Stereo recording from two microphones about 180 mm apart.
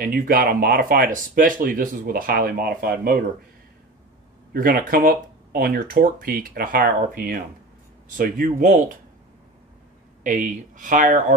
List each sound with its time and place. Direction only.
0.0 s speech: 50° right (ahead or behind)
4.6 s speech: 50° right (ahead or behind)
10.2 s speech: 45° right (ahead or behind)